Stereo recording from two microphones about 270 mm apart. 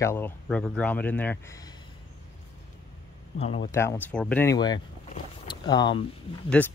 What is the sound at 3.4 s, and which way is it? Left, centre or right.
Speech, left.